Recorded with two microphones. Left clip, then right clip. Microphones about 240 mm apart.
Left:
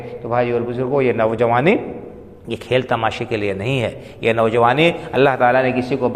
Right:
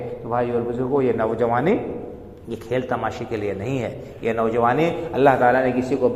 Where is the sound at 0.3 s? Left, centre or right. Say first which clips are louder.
Left 4 dB; left.